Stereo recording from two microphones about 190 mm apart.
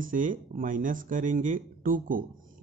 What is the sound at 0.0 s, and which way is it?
Speech, 45° right (ahead or behind).